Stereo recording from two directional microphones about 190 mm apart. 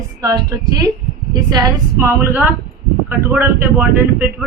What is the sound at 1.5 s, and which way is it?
Speech, 15° right (ahead or behind).